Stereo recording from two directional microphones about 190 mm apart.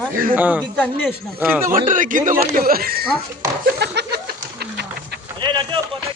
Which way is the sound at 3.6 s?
60° right (ahead or behind).